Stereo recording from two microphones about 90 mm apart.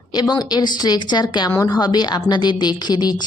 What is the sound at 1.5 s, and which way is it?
A woman's voice, 40° left (ahead or behind).